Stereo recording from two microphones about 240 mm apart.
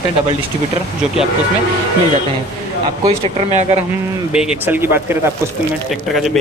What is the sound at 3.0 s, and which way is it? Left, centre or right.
Speech, right.